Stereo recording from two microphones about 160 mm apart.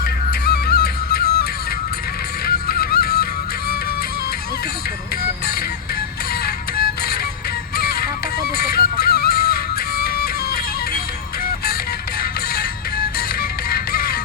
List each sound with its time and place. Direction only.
0.3 s music: 90° left
2.5 s music: 75° left (ahead or behind)
6.4 s music: 75° left (ahead or behind)
13.7 s music: 70° left (ahead or behind)